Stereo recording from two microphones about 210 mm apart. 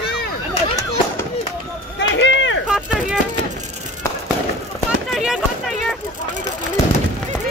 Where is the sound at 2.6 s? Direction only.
5° right (ahead or behind).